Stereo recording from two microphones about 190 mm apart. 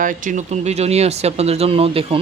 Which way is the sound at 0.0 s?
45° right (ahead or behind).